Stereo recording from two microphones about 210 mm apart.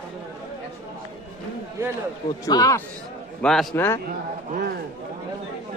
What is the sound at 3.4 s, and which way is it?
Speech, 5° left (ahead or behind).